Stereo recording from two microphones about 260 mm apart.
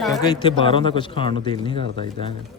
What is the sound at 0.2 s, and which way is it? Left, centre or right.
A man's voice, centre.